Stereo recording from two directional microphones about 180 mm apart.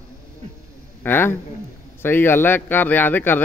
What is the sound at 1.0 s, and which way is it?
Speech, 10° left (ahead or behind).